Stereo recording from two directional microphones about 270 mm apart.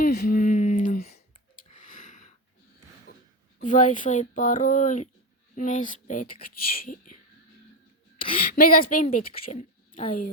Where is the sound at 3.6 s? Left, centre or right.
Left.